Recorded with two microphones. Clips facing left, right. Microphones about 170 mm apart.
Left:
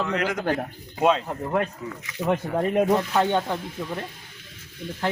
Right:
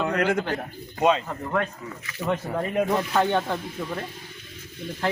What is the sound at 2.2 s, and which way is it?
Speech, 40° left (ahead or behind).